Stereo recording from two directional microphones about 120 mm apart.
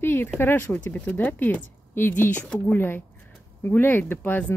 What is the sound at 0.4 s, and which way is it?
Speech, 20° left (ahead or behind).